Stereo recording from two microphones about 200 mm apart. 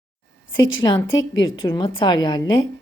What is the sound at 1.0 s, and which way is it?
Speech, 75° left (ahead or behind).